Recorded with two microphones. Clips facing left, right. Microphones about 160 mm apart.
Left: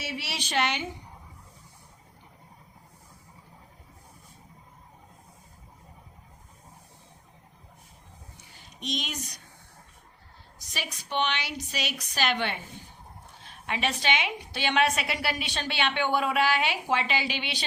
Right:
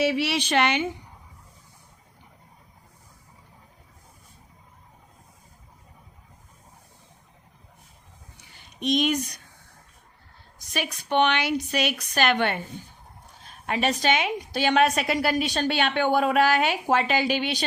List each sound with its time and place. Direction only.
0.0 s a woman's voice: 70° right (ahead or behind)
8.8 s a woman's voice: 55° right (ahead or behind)
10.6 s a woman's voice: 55° right (ahead or behind)